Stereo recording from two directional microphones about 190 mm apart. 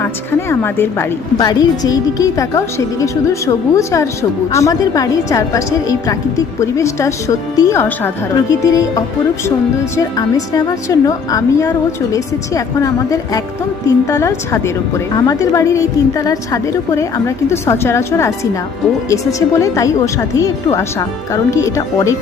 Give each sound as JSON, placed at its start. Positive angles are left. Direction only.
{"t": 0.0, "sound": "a woman's voice", "side_deg": 10}